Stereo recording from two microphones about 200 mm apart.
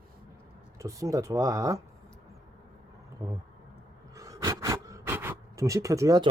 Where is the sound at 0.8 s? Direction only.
15° right (ahead or behind).